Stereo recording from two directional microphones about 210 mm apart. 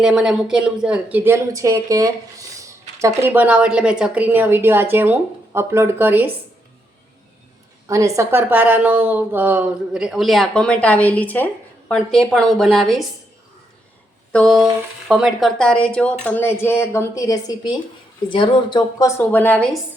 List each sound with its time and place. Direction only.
0.0 s speech: centre (ahead or behind)
3.2 s a woman's voice: 10° right (ahead or behind)
7.9 s a woman's voice: 15° right (ahead or behind); by 13.1 s centre (ahead or behind)
14.3 s a woman's voice: centre (ahead or behind)